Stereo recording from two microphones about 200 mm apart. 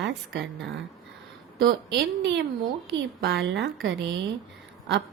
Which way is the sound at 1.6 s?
60° right (ahead or behind).